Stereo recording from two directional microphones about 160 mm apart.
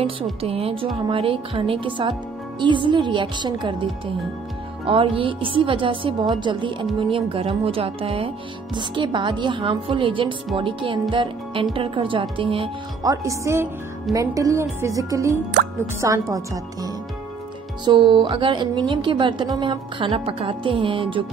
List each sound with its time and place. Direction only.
0.2 s a woman's voice: 35° right (ahead or behind)
13.0 s a woman's voice: 20° right (ahead or behind)
17.8 s a woman's voice: 30° right (ahead or behind)